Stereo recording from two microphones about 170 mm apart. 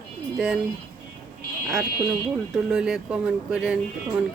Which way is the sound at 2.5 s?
5° right (ahead or behind).